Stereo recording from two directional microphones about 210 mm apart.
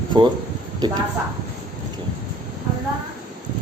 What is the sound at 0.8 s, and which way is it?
Speech, 20° right (ahead or behind).